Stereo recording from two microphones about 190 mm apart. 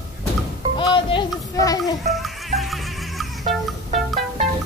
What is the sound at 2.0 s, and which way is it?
Music, centre (ahead or behind).